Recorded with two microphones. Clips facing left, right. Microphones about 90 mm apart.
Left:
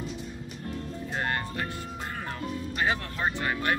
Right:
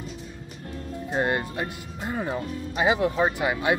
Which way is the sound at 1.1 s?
15° right (ahead or behind).